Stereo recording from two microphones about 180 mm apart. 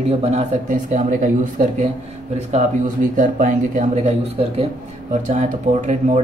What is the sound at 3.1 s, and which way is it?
Speech, 45° right (ahead or behind).